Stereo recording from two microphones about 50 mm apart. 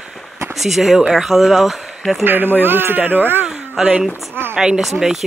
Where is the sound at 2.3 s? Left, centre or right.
Right.